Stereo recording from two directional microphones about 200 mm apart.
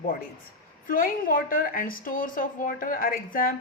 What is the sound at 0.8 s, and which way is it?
A woman's voice, 45° left (ahead or behind).